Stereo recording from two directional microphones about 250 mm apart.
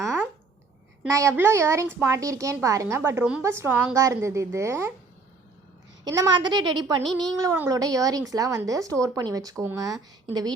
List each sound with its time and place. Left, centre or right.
1.0 s a woman's voice: centre
6.1 s a woman's voice: centre